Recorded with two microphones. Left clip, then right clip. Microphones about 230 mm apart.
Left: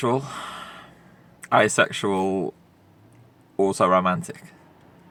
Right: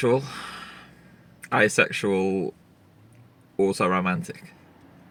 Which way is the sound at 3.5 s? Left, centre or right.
Left.